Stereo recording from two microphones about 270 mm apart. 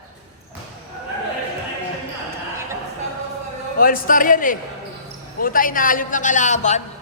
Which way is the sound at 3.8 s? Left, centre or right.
Left.